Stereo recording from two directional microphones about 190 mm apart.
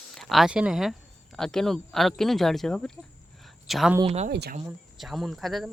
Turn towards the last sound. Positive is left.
turn(degrees=0)  # may be behind; listen again after turning